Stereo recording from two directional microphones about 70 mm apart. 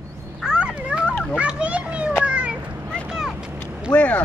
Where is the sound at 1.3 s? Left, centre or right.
Centre.